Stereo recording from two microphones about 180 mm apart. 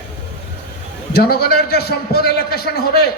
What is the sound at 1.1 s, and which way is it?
A man's voice, 60° left (ahead or behind).